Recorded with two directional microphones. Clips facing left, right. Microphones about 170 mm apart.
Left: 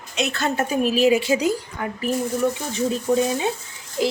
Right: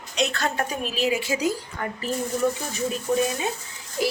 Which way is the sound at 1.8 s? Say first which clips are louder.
Left 2 dB; 5° left (ahead or behind).